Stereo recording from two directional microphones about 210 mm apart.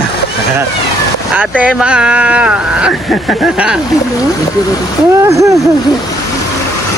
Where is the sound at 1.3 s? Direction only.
5° right (ahead or behind).